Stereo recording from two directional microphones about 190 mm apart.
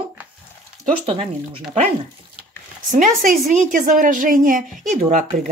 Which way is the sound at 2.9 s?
45° right (ahead or behind).